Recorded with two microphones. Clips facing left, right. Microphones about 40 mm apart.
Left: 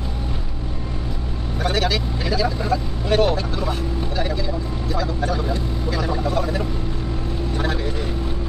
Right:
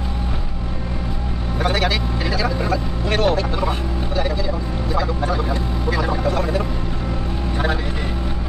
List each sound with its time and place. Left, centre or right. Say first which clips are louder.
1.6 s vehicle: right 1 dB; centre
3.2 s speech: right 1 dB; centre
4.9 s speech: right 2 dB; centre
7.5 s vehicle: right 3 dB; centre